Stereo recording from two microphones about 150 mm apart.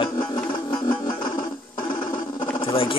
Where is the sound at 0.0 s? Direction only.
30° left (ahead or behind).